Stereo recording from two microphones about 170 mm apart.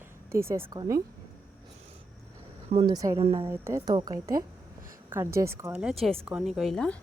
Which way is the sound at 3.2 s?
35° right (ahead or behind).